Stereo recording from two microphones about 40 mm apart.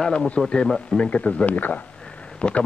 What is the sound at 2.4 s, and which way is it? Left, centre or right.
Speech, left.